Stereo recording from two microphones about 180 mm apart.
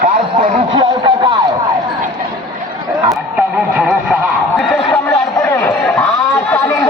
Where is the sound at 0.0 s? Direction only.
45° right (ahead or behind).